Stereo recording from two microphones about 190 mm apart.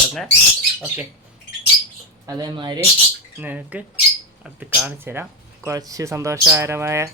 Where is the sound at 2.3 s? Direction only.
20° right (ahead or behind).